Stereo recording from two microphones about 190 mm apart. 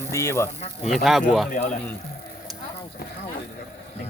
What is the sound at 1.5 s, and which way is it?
Speech, 45° left (ahead or behind).